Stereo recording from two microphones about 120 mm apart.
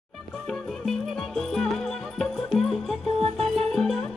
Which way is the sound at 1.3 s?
5° left (ahead or behind).